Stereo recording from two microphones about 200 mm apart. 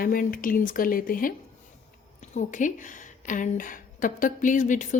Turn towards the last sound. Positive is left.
turn(degrees=40)  # may be behind; listen again after turning